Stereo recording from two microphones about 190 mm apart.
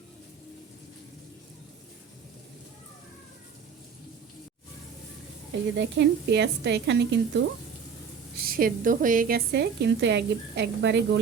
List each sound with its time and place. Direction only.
5.7 s speech: 65° right (ahead or behind)
8.4 s a woman's voice: 50° right (ahead or behind)